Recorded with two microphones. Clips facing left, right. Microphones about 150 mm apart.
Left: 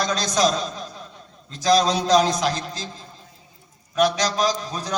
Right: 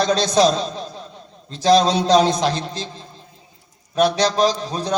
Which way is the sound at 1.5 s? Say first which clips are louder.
Right 4 dB; 30° right (ahead or behind).